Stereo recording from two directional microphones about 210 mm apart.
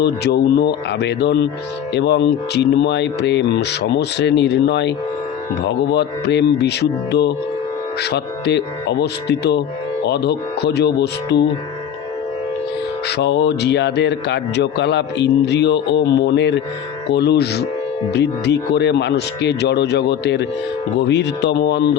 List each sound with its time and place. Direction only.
0.0 s speech: 50° left (ahead or behind)
13.1 s speech: 55° left (ahead or behind)